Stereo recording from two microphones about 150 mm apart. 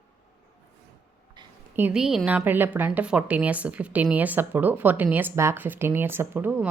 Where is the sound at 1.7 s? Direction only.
10° right (ahead or behind).